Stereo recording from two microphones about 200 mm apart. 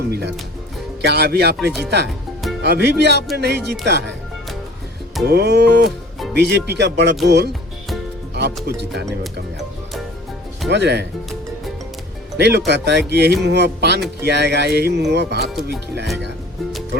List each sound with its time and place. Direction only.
0.1 s speech: 55° right (ahead or behind)
5.2 s speech: 55° right (ahead or behind)
10.7 s speech: 55° right (ahead or behind)
12.4 s speech: 55° right (ahead or behind)